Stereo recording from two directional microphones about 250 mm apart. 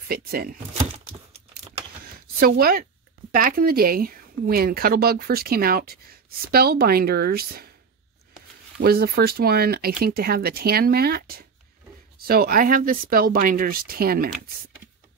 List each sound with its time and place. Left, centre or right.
0.1 s speech: right
0.9 s crumpling: right
2.4 s speech: right
8.7 s speech: right